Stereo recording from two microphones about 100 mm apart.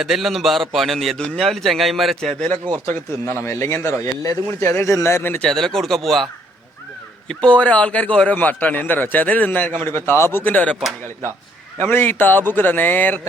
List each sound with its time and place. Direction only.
0.0 s a man's voice: centre (ahead or behind)
2.8 s speech: 25° left (ahead or behind)
5.4 s a man's voice: 5° left (ahead or behind)
7.3 s a man's voice: 10° left (ahead or behind)
11.8 s speech: 20° left (ahead or behind)